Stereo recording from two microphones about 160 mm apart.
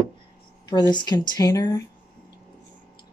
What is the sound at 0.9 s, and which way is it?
Speech, 25° left (ahead or behind).